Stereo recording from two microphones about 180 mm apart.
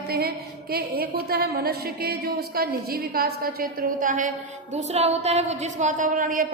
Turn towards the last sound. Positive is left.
turn(degrees=-50)  # may be behind; listen again after turning